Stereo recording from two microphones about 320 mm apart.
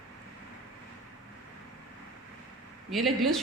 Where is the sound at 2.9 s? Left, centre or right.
Centre.